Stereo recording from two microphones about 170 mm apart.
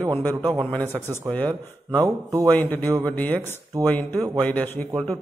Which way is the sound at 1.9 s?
15° right (ahead or behind).